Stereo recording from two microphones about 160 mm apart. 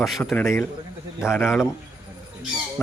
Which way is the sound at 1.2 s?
15° left (ahead or behind).